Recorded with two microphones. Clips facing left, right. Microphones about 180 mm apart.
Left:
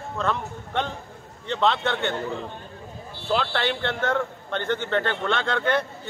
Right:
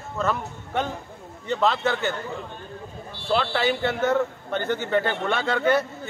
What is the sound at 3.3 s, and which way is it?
A man's voice, centre (ahead or behind).